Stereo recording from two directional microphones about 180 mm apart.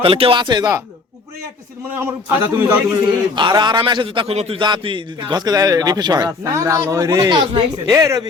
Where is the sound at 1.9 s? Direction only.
10° right (ahead or behind).